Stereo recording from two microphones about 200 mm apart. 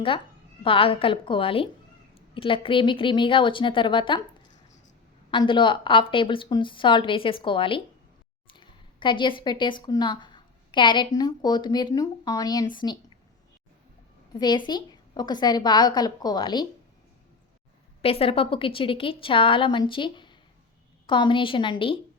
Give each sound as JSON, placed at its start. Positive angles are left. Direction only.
{"t": 0.6, "sound": "a woman's voice", "side_deg": 25}
{"t": 5.3, "sound": "a woman's voice", "side_deg": 25}
{"t": 14.3, "sound": "a woman's voice", "side_deg": 20}
{"t": 18.0, "sound": "a woman's voice", "side_deg": 30}